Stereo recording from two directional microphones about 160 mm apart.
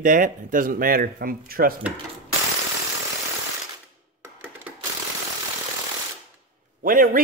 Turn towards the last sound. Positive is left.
turn(degrees=-60)  # may be behind; listen again after turning